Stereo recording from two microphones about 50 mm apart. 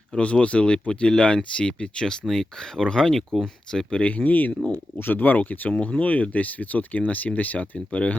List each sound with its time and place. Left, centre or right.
0.2 s speech: left
2.2 s speech: centre
4.2 s speech: left